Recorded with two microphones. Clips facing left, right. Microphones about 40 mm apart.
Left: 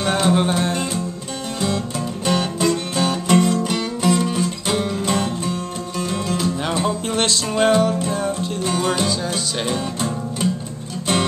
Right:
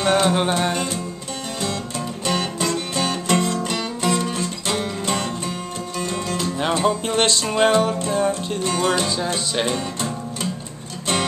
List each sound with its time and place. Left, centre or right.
0.0 s music: centre
2.2 s music: centre
9.2 s music: centre
9.7 s music: centre